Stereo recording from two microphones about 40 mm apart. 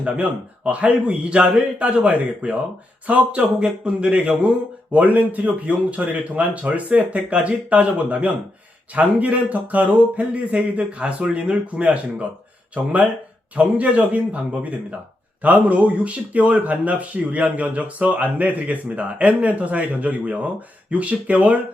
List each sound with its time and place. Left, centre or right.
0.0 s speech: right
3.1 s speech: right
3.6 s speech: right
4.9 s speech: right